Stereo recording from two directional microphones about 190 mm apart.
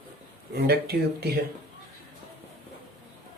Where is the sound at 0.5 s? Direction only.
55° right (ahead or behind).